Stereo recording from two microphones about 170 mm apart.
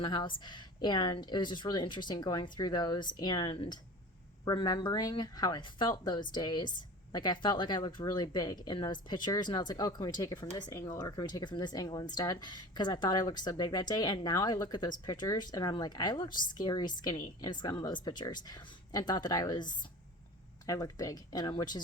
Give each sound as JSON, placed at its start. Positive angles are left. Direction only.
{"t": 0.0, "sound": "a woman's voice", "side_deg": 30}